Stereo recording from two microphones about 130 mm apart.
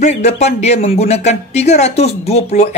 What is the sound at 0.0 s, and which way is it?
Speech, 60° left (ahead or behind).